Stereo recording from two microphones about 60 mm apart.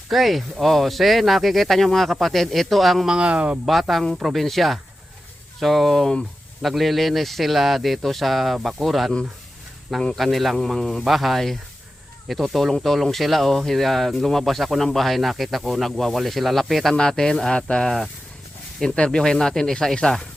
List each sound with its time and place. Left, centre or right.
0.1 s speech: centre
3.1 s speech: centre
3.7 s speech: centre